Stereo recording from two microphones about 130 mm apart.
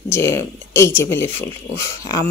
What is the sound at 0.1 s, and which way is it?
A woman's voice, 20° left (ahead or behind).